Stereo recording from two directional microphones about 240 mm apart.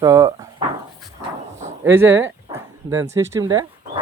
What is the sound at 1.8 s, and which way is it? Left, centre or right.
Speech, centre.